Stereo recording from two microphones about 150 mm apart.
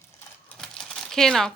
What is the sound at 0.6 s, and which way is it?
Typing, 5° left (ahead or behind).